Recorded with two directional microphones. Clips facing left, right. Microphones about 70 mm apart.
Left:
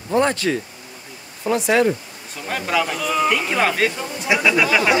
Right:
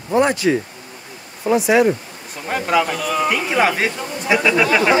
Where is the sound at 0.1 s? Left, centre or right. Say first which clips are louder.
Right 3 dB; centre.